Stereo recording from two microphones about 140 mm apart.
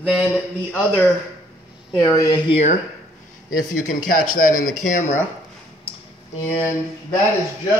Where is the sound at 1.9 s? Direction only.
25° left (ahead or behind).